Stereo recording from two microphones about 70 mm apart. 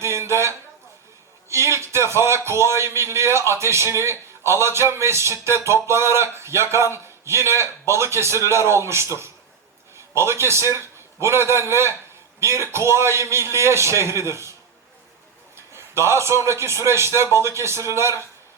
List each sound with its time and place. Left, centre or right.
0.0 s a sound: right
1.5 s a man's voice: right
10.2 s a man's voice: right
15.5 s a man's voice: right